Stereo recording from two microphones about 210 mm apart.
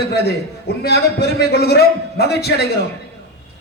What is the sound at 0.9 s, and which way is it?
A man's voice, 50° left (ahead or behind).